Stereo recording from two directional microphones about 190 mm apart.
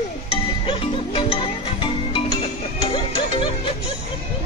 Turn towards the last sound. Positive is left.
turn(degrees=30)  # may be behind; listen again after turning